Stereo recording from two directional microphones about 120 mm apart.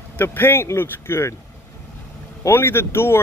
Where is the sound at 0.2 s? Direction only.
20° left (ahead or behind).